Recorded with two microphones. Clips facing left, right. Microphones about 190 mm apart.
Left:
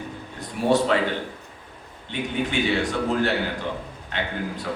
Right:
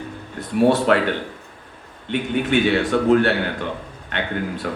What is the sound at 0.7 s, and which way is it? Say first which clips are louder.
Speech: right 3 dB; 60° right (ahead or behind).